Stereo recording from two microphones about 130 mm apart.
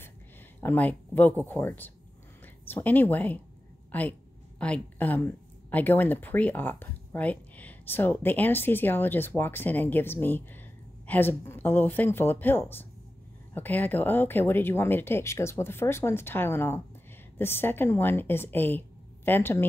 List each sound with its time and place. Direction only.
0.6 s speech: 15° left (ahead or behind)